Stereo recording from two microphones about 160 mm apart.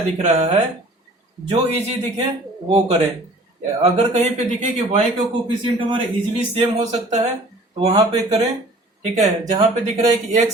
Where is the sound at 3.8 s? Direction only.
45° right (ahead or behind).